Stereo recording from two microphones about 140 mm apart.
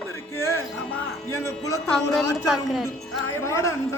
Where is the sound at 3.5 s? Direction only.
20° left (ahead or behind).